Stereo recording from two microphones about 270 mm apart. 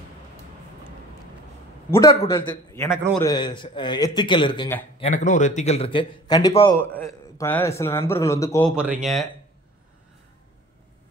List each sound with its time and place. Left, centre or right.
1.9 s a man's voice: centre
4.9 s a man's voice: left
8.7 s speech: centre